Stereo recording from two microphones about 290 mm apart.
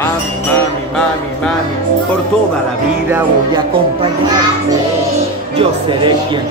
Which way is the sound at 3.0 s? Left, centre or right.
Centre.